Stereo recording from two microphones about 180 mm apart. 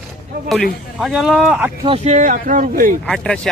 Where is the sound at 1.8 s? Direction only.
35° right (ahead or behind).